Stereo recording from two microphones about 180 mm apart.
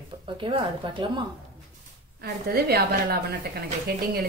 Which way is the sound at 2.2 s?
60° right (ahead or behind).